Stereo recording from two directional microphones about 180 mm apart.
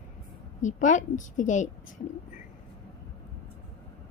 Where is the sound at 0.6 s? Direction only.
45° left (ahead or behind).